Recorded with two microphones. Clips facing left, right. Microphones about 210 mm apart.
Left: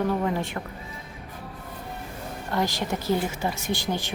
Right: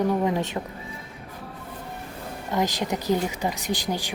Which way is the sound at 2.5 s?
20° right (ahead or behind).